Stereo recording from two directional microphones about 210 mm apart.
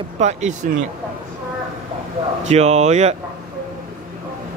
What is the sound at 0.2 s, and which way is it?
Speech, 35° right (ahead or behind).